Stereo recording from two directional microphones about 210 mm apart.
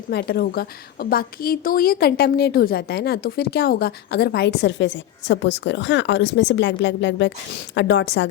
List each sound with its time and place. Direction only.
0.1 s a woman's voice: 50° left (ahead or behind)